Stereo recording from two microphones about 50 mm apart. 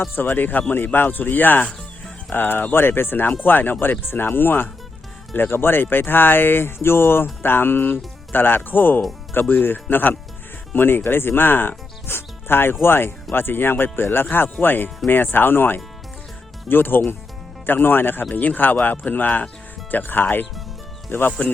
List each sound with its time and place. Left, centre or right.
0.2 s speech: left
12.0 s music: left
12.8 s speech: left